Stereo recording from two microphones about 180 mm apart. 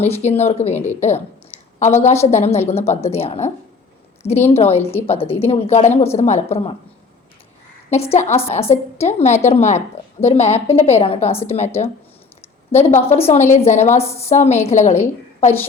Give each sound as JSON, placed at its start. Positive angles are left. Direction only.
{"t": 0.0, "sound": "a woman's voice", "side_deg": 35}
{"t": 4.8, "sound": "a woman's voice", "side_deg": 10}
{"t": 5.0, "sound": "a woman's voice", "side_deg": 30}
{"t": 7.9, "sound": "a woman's voice", "side_deg": 35}
{"t": 12.7, "sound": "a woman's voice", "side_deg": 40}
{"t": 13.9, "sound": "a woman's voice", "side_deg": 15}
{"t": 14.2, "sound": "a woman's voice", "side_deg": 35}